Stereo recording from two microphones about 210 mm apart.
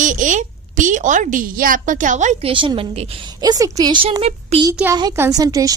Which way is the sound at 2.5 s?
25° right (ahead or behind).